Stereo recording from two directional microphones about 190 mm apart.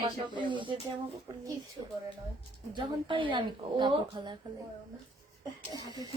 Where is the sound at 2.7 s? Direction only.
25° right (ahead or behind).